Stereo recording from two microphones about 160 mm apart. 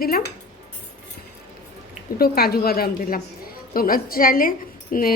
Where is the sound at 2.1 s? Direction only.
70° left (ahead or behind).